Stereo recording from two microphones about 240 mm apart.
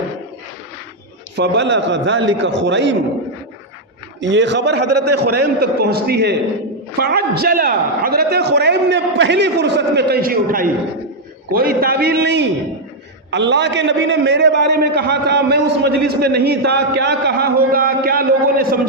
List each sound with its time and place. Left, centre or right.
1.4 s a man's voice: right
4.2 s a man's voice: right